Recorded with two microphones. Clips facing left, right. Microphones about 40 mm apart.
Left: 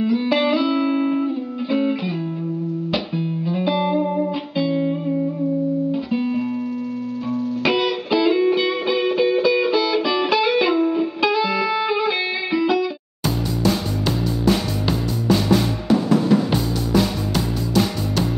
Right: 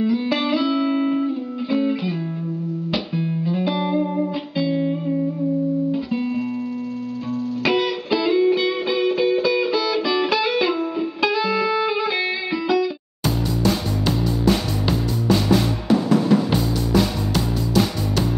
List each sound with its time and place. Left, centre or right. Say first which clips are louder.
0.0 s music: left 2 dB; centre; by 7.4 s left
7.6 s music: even; centre